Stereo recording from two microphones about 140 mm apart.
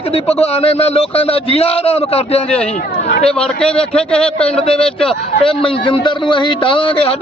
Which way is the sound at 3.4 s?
5° left (ahead or behind).